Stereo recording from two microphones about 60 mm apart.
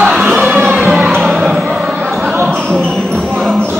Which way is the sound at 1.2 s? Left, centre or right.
Centre.